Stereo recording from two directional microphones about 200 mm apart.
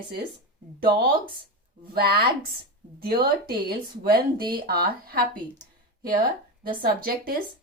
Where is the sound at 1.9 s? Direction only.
50° right (ahead or behind).